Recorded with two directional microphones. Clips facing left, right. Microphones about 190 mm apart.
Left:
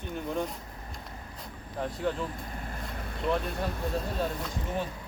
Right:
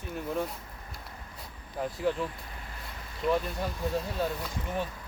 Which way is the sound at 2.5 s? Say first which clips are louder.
Left 6 dB; 45° left (ahead or behind).